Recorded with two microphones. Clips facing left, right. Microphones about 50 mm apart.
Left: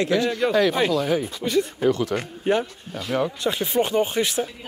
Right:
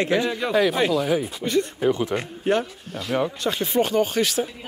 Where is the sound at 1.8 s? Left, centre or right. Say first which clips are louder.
Even; centre.